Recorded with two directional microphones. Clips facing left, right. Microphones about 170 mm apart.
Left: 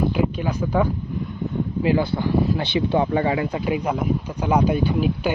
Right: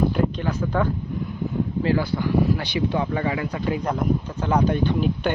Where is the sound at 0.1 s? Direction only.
5° left (ahead or behind).